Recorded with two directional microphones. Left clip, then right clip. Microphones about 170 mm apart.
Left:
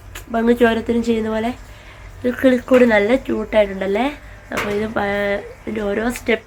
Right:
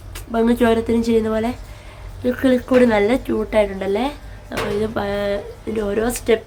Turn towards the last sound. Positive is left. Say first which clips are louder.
# right 1 dB
turn(degrees=10)  # may be behind; listen again after turning